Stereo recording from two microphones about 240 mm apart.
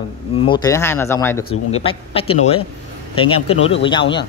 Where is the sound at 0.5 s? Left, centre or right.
Centre.